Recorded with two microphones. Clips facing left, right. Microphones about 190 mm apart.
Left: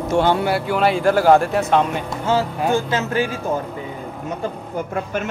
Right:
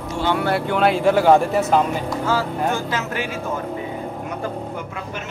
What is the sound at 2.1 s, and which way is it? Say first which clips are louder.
Speech: left 1 dB; 25° left (ahead or behind).